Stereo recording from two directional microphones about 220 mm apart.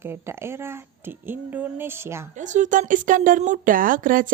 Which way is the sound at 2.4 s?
35° right (ahead or behind).